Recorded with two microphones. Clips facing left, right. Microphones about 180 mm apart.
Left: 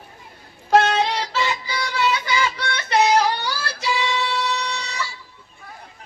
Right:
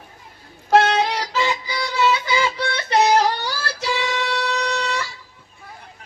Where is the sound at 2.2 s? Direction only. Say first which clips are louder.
Right 2 dB; 30° right (ahead or behind); by 5.0 s 55° right (ahead or behind).